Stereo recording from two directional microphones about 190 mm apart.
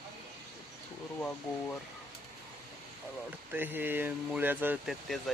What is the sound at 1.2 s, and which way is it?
Speech, 10° left (ahead or behind).